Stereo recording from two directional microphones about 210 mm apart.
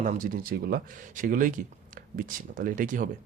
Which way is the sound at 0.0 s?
40° right (ahead or behind).